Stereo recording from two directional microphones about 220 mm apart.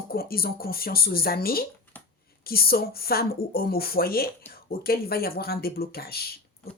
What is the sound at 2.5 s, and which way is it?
Speech, 45° left (ahead or behind).